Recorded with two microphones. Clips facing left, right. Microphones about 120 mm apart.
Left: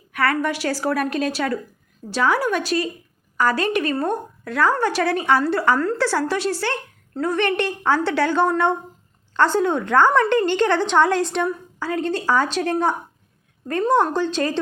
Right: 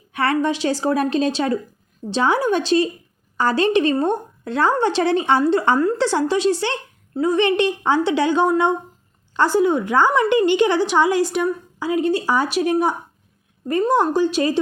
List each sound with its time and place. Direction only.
0.1 s a woman's voice: 25° right (ahead or behind)